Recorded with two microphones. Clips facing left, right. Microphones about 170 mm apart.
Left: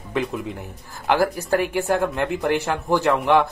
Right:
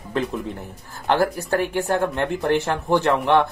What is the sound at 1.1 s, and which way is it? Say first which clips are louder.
Speech: left 1 dB; centre (ahead or behind).